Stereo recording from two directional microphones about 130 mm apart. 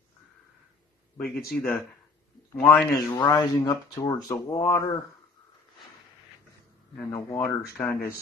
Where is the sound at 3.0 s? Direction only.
30° left (ahead or behind).